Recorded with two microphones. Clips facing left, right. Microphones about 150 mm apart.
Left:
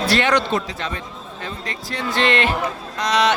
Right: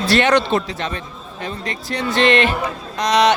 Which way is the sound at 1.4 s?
20° right (ahead or behind).